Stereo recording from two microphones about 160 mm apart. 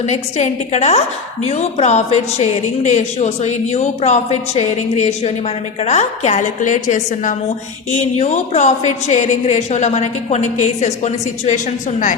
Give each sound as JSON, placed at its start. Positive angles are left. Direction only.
{"t": 0.1, "sound": "a woman's voice", "side_deg": 45}